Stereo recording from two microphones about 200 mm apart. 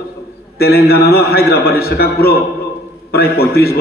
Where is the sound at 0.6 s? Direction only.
50° left (ahead or behind).